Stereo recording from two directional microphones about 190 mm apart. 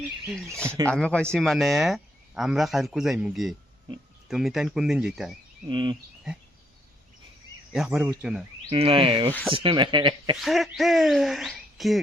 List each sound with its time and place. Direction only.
0.3 s speech: 5° left (ahead or behind)
5.6 s speech: 25° right (ahead or behind)
7.7 s speech: 5° right (ahead or behind)
8.7 s speech: 30° right (ahead or behind)
10.4 s speech: centre (ahead or behind)